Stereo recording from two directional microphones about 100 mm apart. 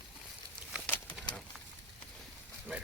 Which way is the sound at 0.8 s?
20° left (ahead or behind).